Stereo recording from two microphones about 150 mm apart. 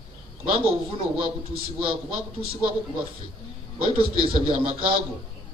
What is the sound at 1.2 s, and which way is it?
Speech, 35° right (ahead or behind).